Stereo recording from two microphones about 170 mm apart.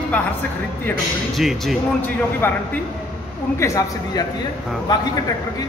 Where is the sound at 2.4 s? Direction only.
15° left (ahead or behind).